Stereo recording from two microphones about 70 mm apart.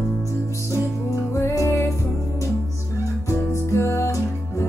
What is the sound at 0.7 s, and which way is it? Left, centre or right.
Music, left.